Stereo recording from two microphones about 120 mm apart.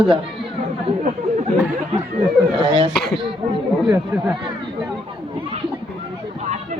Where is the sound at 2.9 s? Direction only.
5° left (ahead or behind).